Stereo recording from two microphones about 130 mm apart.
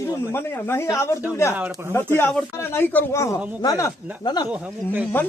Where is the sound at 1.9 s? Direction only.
20° left (ahead or behind).